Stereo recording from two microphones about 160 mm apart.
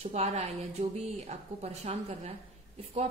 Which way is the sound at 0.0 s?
40° right (ahead or behind).